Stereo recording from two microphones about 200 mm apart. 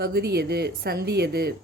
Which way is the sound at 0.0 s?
55° right (ahead or behind).